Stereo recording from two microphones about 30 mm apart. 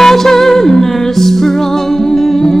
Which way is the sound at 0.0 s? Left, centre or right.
Centre.